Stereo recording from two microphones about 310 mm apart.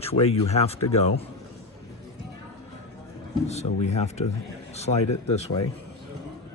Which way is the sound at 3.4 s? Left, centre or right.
Left.